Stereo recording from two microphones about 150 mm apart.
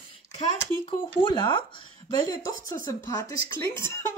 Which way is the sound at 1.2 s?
35° left (ahead or behind).